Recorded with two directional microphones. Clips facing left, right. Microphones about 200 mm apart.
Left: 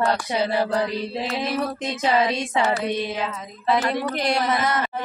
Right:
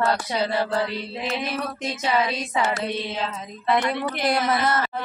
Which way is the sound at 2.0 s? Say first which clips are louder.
Left 3 dB; 25° left (ahead or behind).